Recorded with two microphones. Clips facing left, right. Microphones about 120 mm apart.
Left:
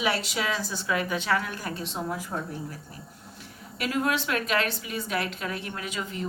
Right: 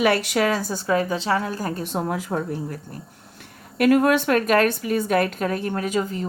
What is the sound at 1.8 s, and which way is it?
A woman's voice, 55° right (ahead or behind).